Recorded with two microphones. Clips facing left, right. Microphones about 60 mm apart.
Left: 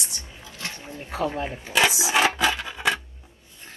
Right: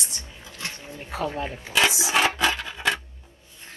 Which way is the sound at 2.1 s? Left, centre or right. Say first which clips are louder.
Left 1 dB; centre.